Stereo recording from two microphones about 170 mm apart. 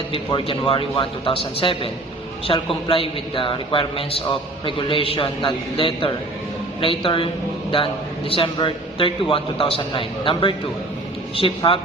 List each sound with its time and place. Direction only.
0.1 s speech: 30° left (ahead or behind)
8.3 s speech: 30° left (ahead or behind)